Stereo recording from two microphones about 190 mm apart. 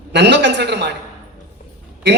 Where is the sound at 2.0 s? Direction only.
65° right (ahead or behind).